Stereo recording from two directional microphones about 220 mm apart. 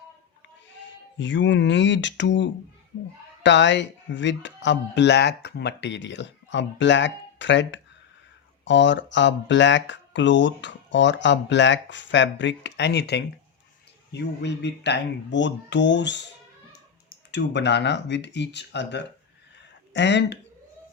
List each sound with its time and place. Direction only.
1.2 s speech: 55° left (ahead or behind)